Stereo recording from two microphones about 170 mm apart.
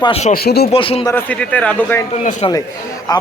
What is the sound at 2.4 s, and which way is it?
Speech, 30° left (ahead or behind).